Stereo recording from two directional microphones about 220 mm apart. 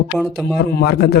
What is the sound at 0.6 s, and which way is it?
Speech, 45° left (ahead or behind).